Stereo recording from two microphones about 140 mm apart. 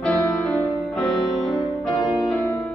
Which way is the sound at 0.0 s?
5° left (ahead or behind).